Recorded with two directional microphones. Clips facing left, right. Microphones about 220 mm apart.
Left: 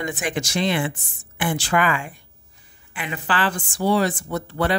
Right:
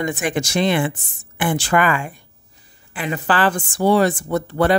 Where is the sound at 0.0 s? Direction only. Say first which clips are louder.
Right 4 dB; 50° right (ahead or behind).